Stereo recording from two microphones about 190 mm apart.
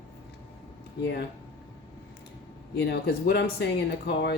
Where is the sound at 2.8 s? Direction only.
60° left (ahead or behind).